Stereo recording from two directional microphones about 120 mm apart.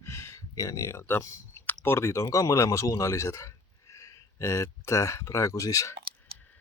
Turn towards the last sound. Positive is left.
turn(degrees=25)  # may be behind; listen again after turning